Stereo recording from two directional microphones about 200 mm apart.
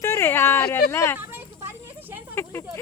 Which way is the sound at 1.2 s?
10° right (ahead or behind).